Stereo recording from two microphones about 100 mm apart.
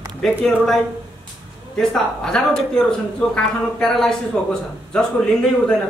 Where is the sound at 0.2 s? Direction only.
5° left (ahead or behind).